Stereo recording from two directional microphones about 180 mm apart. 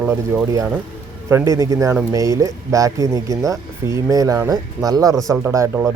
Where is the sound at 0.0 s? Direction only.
5° right (ahead or behind).